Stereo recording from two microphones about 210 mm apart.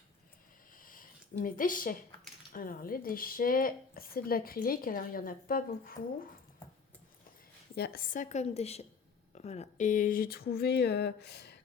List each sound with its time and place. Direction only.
0.8 s a sound: 40° left (ahead or behind)
2.5 s speech: 40° left (ahead or behind)
7.8 s a woman's voice: 45° left (ahead or behind)